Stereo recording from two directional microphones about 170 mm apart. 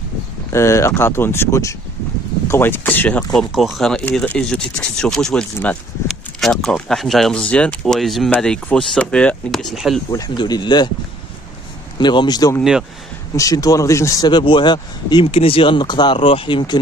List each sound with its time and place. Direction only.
0.5 s speech: 15° left (ahead or behind)
3.3 s speech: centre (ahead or behind)
10.1 s speech: 25° left (ahead or behind)
12.0 s speech: 25° left (ahead or behind)